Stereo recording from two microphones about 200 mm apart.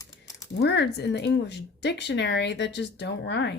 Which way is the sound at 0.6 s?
60° left (ahead or behind).